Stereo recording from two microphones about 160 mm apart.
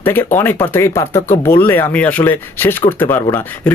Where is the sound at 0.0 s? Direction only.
15° left (ahead or behind).